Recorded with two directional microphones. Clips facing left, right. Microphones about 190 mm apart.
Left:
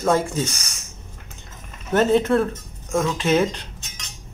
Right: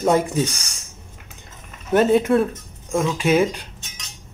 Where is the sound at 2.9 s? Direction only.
Centre (ahead or behind).